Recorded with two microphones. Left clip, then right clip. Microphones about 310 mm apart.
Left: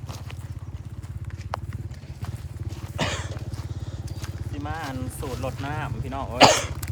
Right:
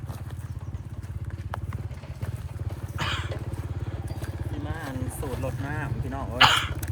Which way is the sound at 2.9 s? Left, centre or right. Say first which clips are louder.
Left 2 dB; left.